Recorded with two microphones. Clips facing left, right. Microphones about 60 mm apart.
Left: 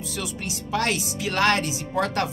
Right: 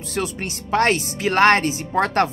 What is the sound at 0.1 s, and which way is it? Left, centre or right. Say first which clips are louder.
Speech: right 8 dB; right.